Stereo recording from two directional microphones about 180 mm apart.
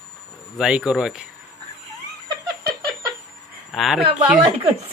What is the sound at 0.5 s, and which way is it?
Speech, centre (ahead or behind).